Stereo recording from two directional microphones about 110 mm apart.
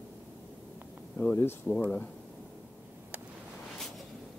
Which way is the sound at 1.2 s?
15° left (ahead or behind).